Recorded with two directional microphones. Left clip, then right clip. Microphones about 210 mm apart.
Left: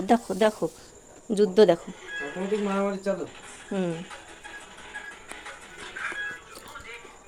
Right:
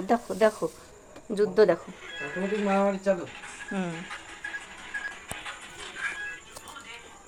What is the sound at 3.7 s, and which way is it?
Speech, 30° left (ahead or behind).